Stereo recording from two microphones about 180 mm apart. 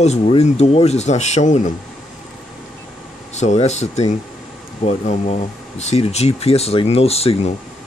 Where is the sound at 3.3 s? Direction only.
40° left (ahead or behind).